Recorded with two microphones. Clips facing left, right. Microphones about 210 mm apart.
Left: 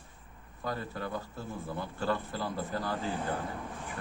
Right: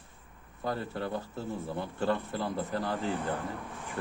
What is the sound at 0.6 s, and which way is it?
A man's voice, 25° right (ahead or behind).